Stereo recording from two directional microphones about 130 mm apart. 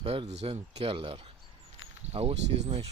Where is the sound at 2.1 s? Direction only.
55° right (ahead or behind).